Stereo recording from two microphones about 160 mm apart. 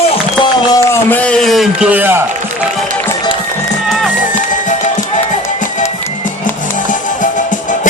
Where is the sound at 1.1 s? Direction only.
5° left (ahead or behind); by 2.2 s 10° right (ahead or behind).